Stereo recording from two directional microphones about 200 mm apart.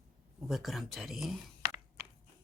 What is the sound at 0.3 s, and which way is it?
Speech, centre (ahead or behind).